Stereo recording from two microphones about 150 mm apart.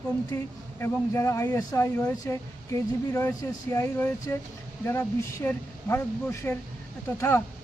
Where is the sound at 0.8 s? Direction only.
20° left (ahead or behind).